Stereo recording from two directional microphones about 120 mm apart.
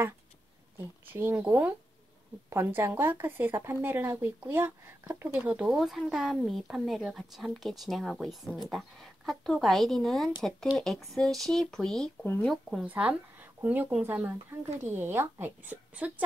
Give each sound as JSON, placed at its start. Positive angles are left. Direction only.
{"t": 0.7, "sound": "speech", "side_deg": -15}
{"t": 12.8, "sound": "speech", "side_deg": -15}